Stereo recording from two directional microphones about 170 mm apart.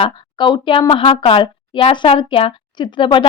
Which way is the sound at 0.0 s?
30° left (ahead or behind).